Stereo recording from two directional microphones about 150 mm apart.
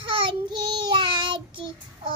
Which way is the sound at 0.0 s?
35° right (ahead or behind).